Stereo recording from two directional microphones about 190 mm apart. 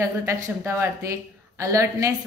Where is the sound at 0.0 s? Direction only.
15° right (ahead or behind).